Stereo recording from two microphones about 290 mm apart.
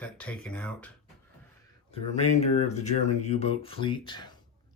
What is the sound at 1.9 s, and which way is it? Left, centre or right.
Speech, left.